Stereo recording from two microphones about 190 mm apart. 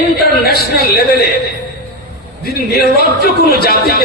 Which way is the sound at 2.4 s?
55° left (ahead or behind).